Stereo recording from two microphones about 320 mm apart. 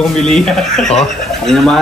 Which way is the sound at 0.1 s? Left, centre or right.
Centre.